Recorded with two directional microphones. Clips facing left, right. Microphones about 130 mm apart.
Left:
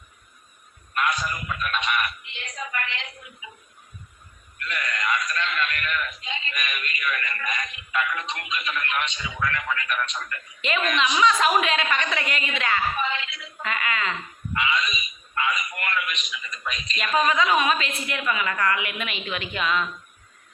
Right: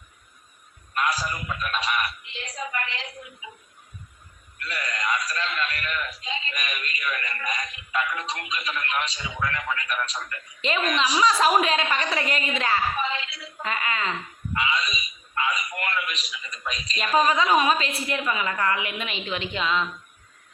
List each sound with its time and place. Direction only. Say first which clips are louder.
1.0 s a man's voice: even; 35° right (ahead or behind)
4.6 s a man's voice: left 1 dB; 35° right (ahead or behind)